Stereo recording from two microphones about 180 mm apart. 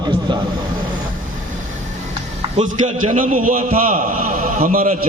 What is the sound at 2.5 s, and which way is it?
A man's voice, 40° right (ahead or behind).